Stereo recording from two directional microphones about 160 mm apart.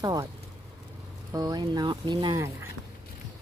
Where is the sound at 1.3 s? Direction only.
25° right (ahead or behind).